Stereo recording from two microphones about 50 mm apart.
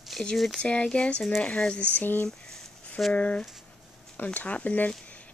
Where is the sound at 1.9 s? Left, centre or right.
Left.